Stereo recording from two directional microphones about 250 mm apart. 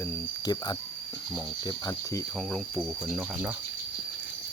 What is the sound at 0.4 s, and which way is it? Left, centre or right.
Speech, centre.